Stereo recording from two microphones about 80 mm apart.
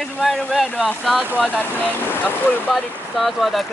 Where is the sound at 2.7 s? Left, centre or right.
Centre.